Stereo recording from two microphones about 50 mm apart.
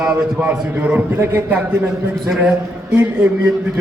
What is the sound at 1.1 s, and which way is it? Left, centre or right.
Speech, right.